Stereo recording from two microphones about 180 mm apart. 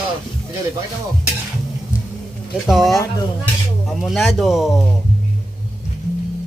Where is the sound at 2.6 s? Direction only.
Centre (ahead or behind).